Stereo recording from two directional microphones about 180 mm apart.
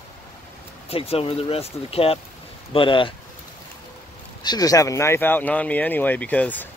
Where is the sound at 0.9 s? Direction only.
30° left (ahead or behind).